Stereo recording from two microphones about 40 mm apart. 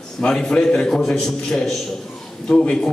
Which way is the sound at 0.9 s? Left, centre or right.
Centre.